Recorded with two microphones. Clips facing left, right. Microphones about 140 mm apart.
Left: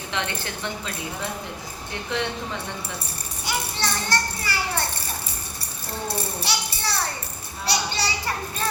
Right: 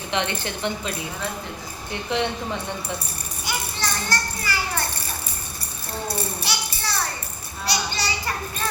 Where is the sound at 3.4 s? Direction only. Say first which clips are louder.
Left 1 dB; 30° left (ahead or behind).